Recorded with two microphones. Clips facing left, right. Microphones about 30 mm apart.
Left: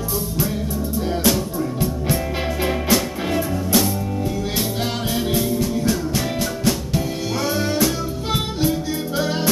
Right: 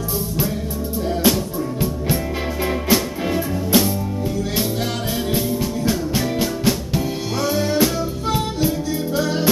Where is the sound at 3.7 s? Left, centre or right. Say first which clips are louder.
Right 2 dB; right.